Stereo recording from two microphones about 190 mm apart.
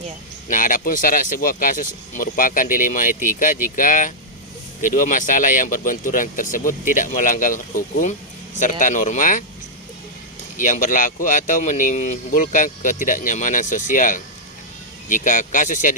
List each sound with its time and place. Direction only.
0.4 s speech: 45° left (ahead or behind)
10.6 s speech: 45° left (ahead or behind)